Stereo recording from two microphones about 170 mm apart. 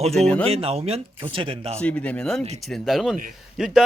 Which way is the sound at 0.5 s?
35° right (ahead or behind).